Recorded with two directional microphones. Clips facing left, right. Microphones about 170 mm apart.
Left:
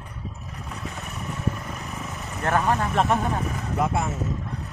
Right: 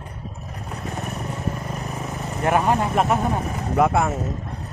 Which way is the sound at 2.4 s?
15° right (ahead or behind).